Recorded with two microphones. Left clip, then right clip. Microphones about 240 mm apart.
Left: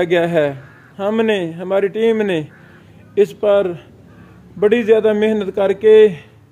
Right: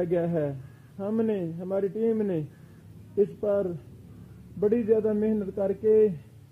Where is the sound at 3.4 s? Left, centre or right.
Left.